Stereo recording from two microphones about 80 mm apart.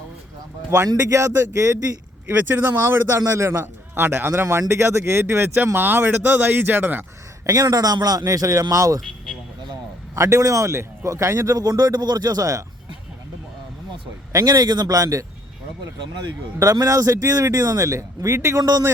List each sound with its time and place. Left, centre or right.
1.1 s speech: right
2.3 s a man's voice: right
7.4 s a man's voice: right
10.2 s speech: right
11.5 s a man's voice: right
14.3 s a man's voice: right
16.6 s a man's voice: right